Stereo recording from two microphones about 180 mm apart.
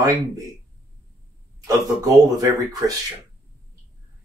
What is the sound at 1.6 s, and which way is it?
Speech, 20° right (ahead or behind).